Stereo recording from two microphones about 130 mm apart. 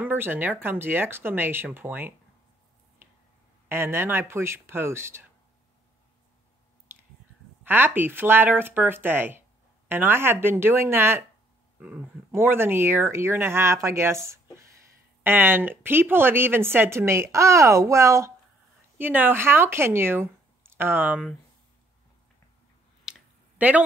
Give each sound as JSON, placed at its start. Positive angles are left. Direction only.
{"t": 0.0, "sound": "speech", "side_deg": -15}
{"t": 3.6, "sound": "speech", "side_deg": -20}
{"t": 7.6, "sound": "speech", "side_deg": -15}
{"t": 23.1, "sound": "a sound", "side_deg": -5}
{"t": 23.6, "sound": "a man's voice", "side_deg": -10}